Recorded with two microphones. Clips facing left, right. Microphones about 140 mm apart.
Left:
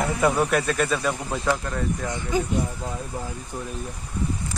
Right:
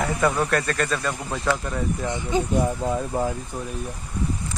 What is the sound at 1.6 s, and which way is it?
Speech, 10° right (ahead or behind).